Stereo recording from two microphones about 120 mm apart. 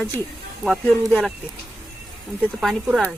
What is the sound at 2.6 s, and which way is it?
Speech, centre (ahead or behind).